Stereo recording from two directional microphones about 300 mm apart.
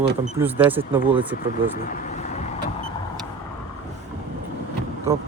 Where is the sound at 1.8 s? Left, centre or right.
Left.